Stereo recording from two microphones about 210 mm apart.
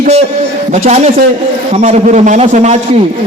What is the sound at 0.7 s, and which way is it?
Speech, 30° right (ahead or behind).